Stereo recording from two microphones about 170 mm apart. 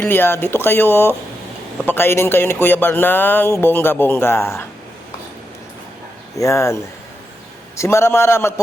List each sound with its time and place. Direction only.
0.0 s speech: 10° left (ahead or behind)
6.3 s speech: 20° left (ahead or behind)
7.8 s speech: 15° left (ahead or behind)